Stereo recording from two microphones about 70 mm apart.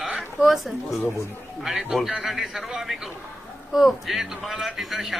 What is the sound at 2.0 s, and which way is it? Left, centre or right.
A man's voice, centre.